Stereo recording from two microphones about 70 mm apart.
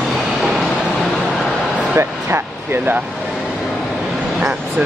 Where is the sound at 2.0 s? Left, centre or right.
Right.